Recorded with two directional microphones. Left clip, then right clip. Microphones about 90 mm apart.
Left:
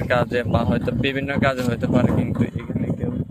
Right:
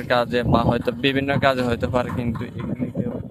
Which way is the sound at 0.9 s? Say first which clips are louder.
Right 2 dB; 80° right.